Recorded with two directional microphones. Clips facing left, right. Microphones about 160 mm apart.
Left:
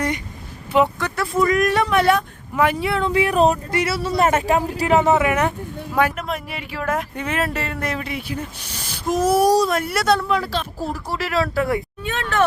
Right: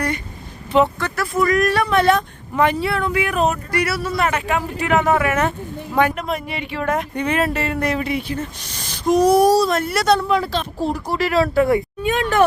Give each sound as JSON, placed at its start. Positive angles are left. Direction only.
{"t": 0.7, "sound": "speech", "side_deg": 10}
{"t": 2.9, "sound": "speech", "side_deg": 25}
{"t": 3.7, "sound": "speech", "side_deg": 25}
{"t": 5.9, "sound": "speech", "side_deg": 5}
{"t": 12.0, "sound": "speech", "side_deg": -10}